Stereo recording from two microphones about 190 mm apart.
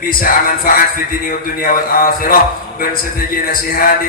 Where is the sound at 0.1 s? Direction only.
50° left (ahead or behind).